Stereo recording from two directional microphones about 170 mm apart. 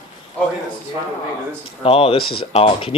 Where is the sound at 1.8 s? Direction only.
35° left (ahead or behind).